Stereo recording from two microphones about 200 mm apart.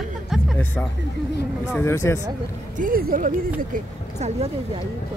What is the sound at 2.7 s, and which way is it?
Speech, 45° right (ahead or behind).